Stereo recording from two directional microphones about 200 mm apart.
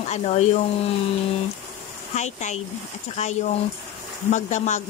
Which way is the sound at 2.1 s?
35° left (ahead or behind).